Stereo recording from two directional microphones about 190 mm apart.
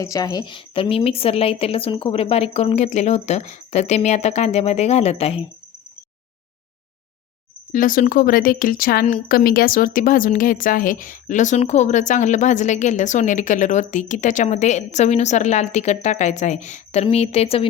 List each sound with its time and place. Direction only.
0.0 s a woman's voice: 20° left (ahead or behind)
7.7 s a woman's voice: 45° left (ahead or behind)